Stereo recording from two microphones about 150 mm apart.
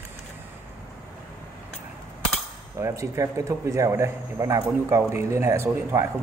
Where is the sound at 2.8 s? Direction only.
20° right (ahead or behind).